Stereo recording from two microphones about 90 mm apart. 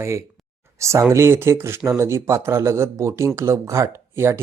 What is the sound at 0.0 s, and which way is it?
Speech, 30° right (ahead or behind).